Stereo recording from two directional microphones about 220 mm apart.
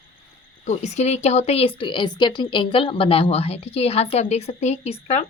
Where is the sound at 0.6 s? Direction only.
30° left (ahead or behind).